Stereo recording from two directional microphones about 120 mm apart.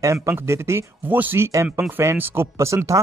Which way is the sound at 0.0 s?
25° right (ahead or behind).